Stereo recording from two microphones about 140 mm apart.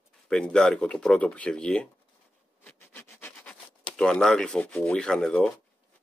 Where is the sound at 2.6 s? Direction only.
15° left (ahead or behind).